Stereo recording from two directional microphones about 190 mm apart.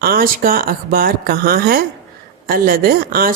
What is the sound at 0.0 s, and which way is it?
Speech, 50° right (ahead or behind).